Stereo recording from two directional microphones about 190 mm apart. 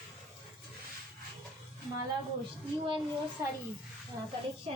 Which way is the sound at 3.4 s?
15° right (ahead or behind).